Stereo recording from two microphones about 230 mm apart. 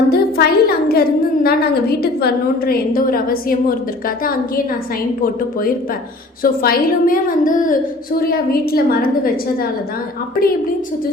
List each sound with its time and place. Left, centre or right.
0.1 s a woman's voice: left
6.4 s a woman's voice: left